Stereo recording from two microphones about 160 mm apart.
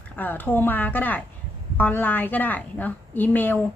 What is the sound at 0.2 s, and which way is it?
A woman's voice, 10° left (ahead or behind).